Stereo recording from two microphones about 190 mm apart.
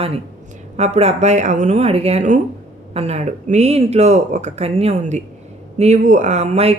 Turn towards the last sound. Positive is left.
turn(degrees=-35)  # may be behind; listen again after turning